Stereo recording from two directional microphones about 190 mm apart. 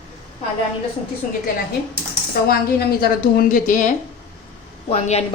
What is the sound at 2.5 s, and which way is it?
A woman's voice, 55° left (ahead or behind).